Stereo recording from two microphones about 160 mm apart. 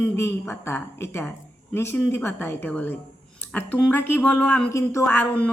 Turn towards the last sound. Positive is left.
turn(degrees=10)  # may be behind; listen again after turning